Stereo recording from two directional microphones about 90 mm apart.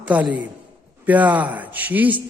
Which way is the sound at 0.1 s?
15° right (ahead or behind).